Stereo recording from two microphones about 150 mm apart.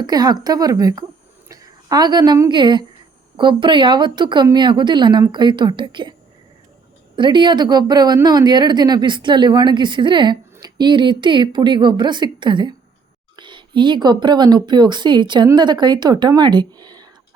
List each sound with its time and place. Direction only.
0.0 s a woman's voice: 25° right (ahead or behind)
7.2 s a woman's voice: 30° right (ahead or behind)